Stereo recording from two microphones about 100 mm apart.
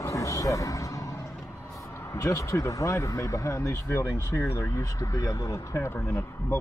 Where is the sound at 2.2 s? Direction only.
30° left (ahead or behind).